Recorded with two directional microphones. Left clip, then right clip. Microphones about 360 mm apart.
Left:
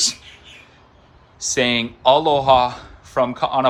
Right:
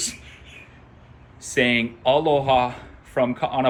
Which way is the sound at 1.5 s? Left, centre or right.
Centre.